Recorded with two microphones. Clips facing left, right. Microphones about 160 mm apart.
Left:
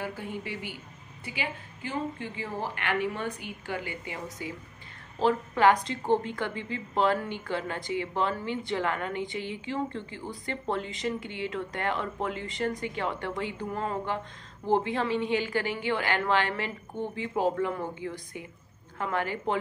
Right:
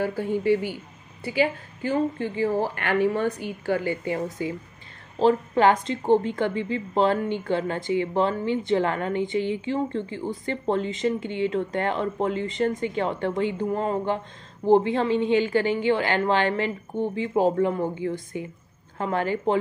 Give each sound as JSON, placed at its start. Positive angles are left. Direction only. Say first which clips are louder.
{"t": 0.0, "sound": "a woman's voice", "louder": "right 11 dB", "side_deg": -35}